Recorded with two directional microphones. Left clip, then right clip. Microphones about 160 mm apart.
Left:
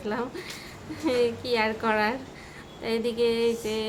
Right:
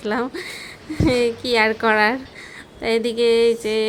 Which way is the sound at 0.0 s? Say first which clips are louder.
Right 8 dB; 45° right (ahead or behind).